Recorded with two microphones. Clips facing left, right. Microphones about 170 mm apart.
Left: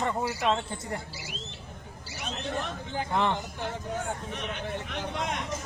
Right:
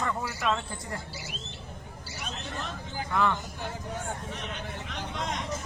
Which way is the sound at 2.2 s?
55° left (ahead or behind).